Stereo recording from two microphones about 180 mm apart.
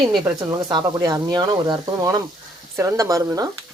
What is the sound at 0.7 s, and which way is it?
Speech, 20° right (ahead or behind).